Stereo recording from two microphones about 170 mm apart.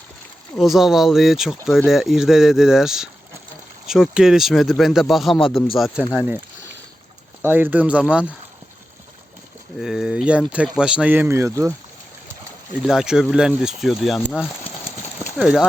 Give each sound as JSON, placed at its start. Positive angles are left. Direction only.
{"t": 0.6, "sound": "speech", "side_deg": 0}
{"t": 7.4, "sound": "speech", "side_deg": -10}
{"t": 9.7, "sound": "speech", "side_deg": -5}
{"t": 12.8, "sound": "speech", "side_deg": -5}